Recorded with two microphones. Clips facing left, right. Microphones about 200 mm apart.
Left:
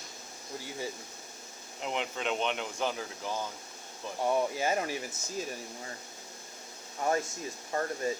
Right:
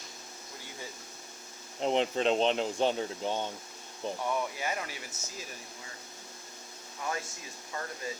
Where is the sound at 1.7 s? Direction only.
35° right (ahead or behind).